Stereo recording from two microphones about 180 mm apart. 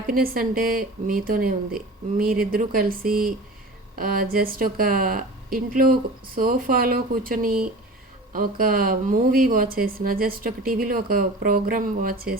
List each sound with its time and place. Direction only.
0.1 s speech: 50° right (ahead or behind)